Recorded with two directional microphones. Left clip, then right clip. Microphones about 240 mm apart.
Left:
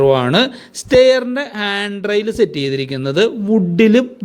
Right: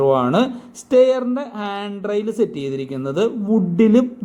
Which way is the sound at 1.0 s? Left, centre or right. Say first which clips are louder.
Left 6 dB; left.